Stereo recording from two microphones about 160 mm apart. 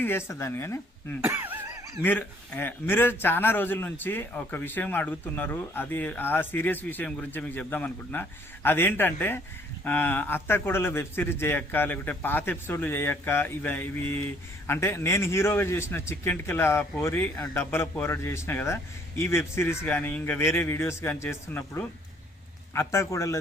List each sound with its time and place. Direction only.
0.0 s a man's voice: 15° left (ahead or behind)
1.2 s a sound: 15° right (ahead or behind)
2.0 s a man's voice: 10° left (ahead or behind)